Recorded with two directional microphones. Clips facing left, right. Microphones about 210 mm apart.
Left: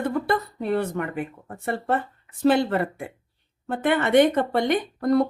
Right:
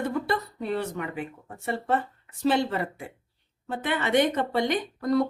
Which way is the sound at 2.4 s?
55° left (ahead or behind).